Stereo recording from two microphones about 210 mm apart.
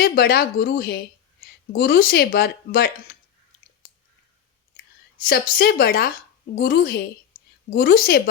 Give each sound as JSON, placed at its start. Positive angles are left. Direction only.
{"t": 0.0, "sound": "speech", "side_deg": 45}
{"t": 5.1, "sound": "speech", "side_deg": 45}